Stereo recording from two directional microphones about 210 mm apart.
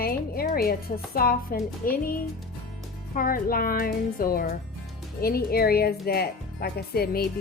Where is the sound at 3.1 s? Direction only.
40° left (ahead or behind).